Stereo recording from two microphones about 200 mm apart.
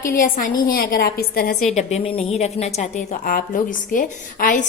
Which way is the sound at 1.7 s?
30° left (ahead or behind).